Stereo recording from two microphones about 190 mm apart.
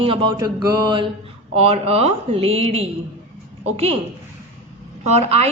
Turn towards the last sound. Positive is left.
turn(degrees=-35)  # may be behind; listen again after turning